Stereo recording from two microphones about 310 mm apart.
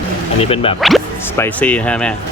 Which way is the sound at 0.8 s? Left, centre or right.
Centre.